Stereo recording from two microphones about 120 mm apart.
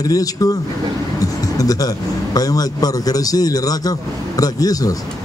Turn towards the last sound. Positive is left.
turn(degrees=30)  # may be behind; listen again after turning